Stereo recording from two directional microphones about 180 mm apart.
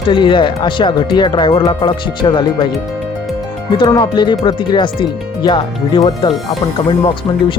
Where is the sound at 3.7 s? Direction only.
25° left (ahead or behind).